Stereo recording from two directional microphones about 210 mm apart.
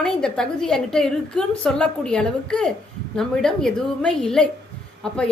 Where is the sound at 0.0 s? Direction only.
5° left (ahead or behind).